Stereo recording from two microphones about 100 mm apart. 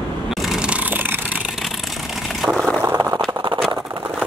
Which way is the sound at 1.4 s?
Centre (ahead or behind).